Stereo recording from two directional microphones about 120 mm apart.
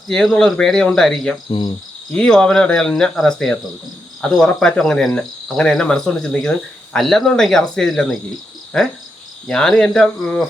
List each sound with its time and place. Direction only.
0.1 s cricket: 5° left (ahead or behind)
1.5 s cricket: 45° left (ahead or behind)
2.1 s cricket: 5° left (ahead or behind)